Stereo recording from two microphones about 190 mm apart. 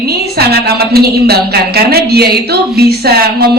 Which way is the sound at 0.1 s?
55° right (ahead or behind).